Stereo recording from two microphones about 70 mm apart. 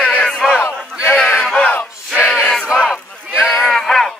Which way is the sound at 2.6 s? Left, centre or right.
Centre.